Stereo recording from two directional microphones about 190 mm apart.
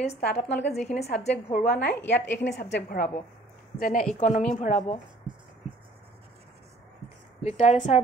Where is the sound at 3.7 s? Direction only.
45° left (ahead or behind).